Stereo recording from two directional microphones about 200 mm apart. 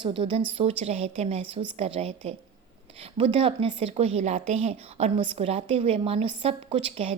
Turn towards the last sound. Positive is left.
turn(degrees=-30)  # may be behind; listen again after turning